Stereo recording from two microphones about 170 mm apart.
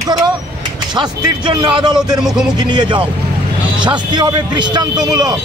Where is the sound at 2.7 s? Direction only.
30° right (ahead or behind).